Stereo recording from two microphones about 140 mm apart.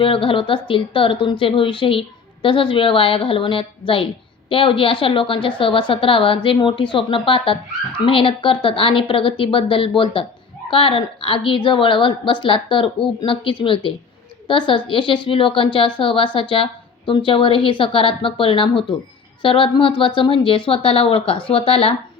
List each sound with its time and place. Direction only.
0.0 s a woman's voice: 40° left (ahead or behind)